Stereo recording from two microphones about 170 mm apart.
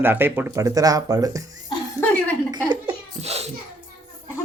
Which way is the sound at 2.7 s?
35° right (ahead or behind).